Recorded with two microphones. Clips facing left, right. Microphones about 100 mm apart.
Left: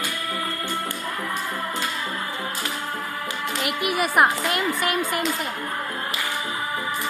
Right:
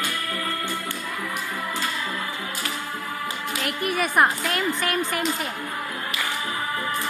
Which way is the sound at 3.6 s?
75° left (ahead or behind).